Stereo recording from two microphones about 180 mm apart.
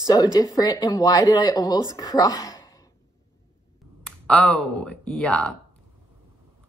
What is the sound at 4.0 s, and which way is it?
Speech, 5° left (ahead or behind).